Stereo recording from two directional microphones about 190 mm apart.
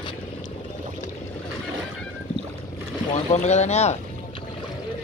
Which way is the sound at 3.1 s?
35° left (ahead or behind).